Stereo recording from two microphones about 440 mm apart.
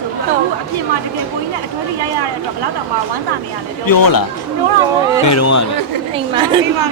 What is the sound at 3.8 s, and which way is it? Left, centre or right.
Speech, left.